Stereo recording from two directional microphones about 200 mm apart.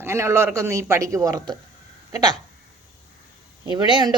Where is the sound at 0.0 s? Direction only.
15° right (ahead or behind).